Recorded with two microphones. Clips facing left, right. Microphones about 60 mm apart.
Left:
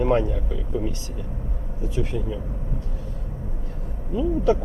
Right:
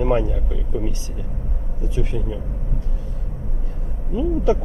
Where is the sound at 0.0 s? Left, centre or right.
Centre.